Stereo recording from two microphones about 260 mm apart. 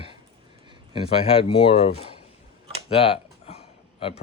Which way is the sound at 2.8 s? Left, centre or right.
Left.